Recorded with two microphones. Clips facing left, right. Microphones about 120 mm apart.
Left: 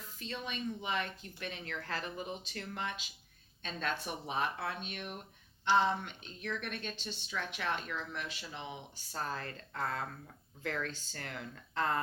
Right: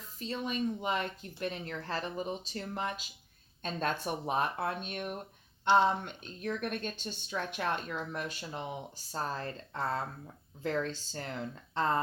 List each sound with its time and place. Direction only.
0.2 s a woman's voice: 35° right (ahead or behind)